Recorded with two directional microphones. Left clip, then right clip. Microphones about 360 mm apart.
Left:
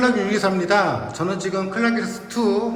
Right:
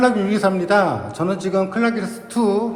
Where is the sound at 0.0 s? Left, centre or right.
Centre.